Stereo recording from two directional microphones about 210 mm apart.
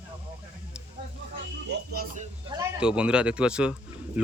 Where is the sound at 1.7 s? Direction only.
45° right (ahead or behind).